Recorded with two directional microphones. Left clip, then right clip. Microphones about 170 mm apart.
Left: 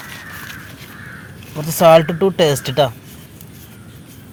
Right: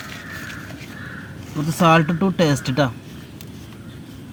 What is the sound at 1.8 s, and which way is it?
Speech, 70° left (ahead or behind).